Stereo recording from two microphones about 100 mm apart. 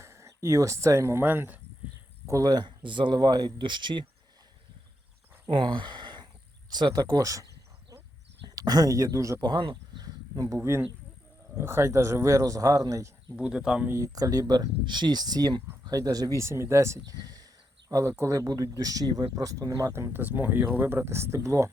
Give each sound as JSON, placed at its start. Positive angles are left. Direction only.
{"t": 0.0, "sound": "speech", "side_deg": -30}
{"t": 2.2, "sound": "speech", "side_deg": -35}
{"t": 5.5, "sound": "a sound", "side_deg": -55}
{"t": 6.7, "sound": "speech", "side_deg": -45}
{"t": 8.4, "sound": "speech", "side_deg": -40}
{"t": 10.6, "sound": "speech", "side_deg": -25}
{"t": 13.3, "sound": "speech", "side_deg": -10}
{"t": 13.8, "sound": "speech", "side_deg": -30}
{"t": 16.4, "sound": "speech", "side_deg": -25}
{"t": 17.1, "sound": "a sound", "side_deg": -40}
{"t": 18.2, "sound": "speech", "side_deg": -35}
{"t": 20.1, "sound": "speech", "side_deg": -20}